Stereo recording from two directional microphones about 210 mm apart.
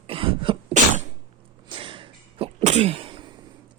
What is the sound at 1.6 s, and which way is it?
Sneeze, 25° right (ahead or behind).